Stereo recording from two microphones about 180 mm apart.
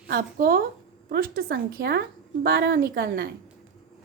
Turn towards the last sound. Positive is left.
turn(degrees=-60)  # may be behind; listen again after turning